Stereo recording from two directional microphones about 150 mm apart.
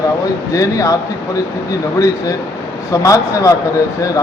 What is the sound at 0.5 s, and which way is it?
Speech, 20° left (ahead or behind).